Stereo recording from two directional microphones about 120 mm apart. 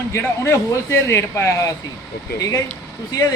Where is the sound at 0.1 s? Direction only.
20° left (ahead or behind).